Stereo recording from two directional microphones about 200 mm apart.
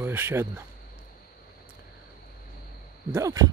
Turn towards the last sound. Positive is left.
turn(degrees=-15)  # may be behind; listen again after turning